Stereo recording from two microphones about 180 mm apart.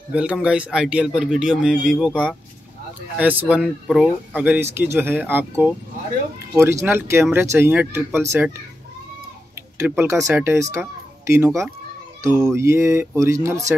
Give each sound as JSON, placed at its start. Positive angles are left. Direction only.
{"t": 0.1, "sound": "a man's voice", "side_deg": -5}
{"t": 9.6, "sound": "speech", "side_deg": -10}